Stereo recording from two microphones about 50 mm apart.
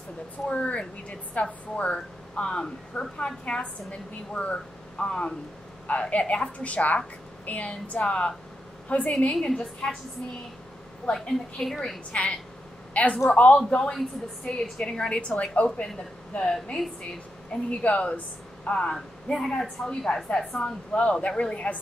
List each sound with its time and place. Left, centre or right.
0.5 s a woman's voice: left
9.2 s speech: centre
11.6 s speech: centre
12.1 s speech: left
13.9 s speech: centre
17.5 s a woman's voice: left
18.7 s speech: centre
19.8 s speech: left